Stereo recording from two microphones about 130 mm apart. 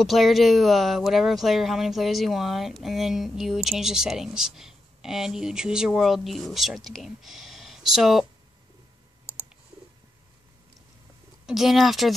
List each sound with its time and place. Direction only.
0.0 s speech: centre (ahead or behind)
11.4 s speech: centre (ahead or behind)